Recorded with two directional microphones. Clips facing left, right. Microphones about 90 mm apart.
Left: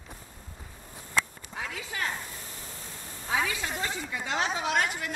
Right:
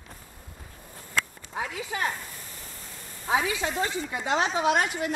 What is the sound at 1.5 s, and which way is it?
Speech, 25° right (ahead or behind).